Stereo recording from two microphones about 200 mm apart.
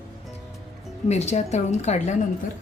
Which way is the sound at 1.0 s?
35° left (ahead or behind).